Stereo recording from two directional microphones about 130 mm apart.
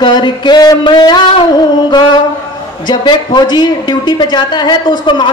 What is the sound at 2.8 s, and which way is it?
A man's voice, 35° left (ahead or behind).